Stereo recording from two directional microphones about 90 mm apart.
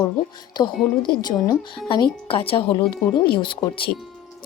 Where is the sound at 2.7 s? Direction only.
60° left (ahead or behind).